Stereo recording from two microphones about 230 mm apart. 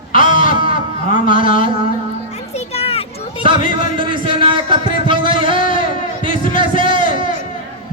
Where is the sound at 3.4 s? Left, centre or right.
Right.